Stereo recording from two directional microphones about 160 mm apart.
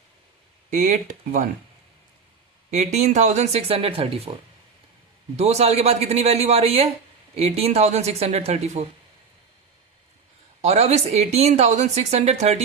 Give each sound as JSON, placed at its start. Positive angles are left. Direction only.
{"t": 0.7, "sound": "speech", "side_deg": -50}
{"t": 2.6, "sound": "speech", "side_deg": -45}
{"t": 5.4, "sound": "a man's voice", "side_deg": -40}
{"t": 10.6, "sound": "speech", "side_deg": -45}